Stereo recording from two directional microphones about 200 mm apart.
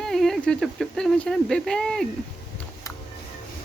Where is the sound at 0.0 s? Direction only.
Centre (ahead or behind).